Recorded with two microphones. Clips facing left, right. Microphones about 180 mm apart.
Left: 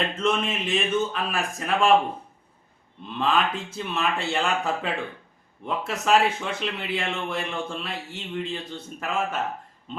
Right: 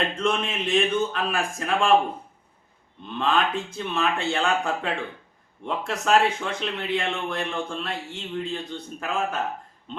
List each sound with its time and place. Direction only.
0.2 s speech: centre (ahead or behind)
3.1 s speech: centre (ahead or behind)